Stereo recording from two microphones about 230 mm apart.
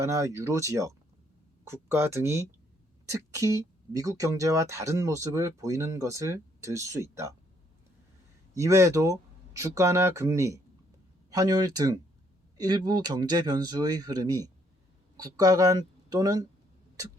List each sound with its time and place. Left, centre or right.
0.0 s speech: centre
8.5 s speech: centre